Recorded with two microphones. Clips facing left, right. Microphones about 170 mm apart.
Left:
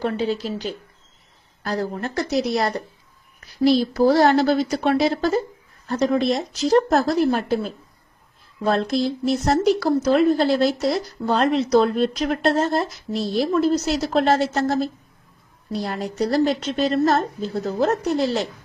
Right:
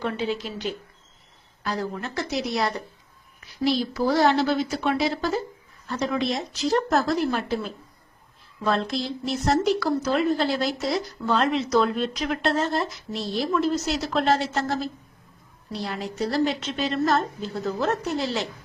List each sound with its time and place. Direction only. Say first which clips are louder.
0.0 s speech: left 4 dB; 35° left (ahead or behind)